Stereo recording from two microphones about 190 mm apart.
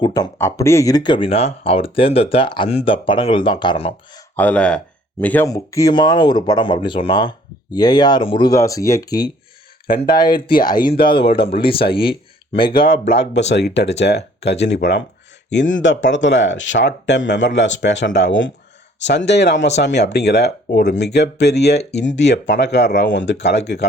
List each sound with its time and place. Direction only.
0.0 s speech: 20° left (ahead or behind)
4.4 s speech: 5° left (ahead or behind); by 12.9 s 25° left (ahead or behind)
12.9 s speech: 65° left (ahead or behind)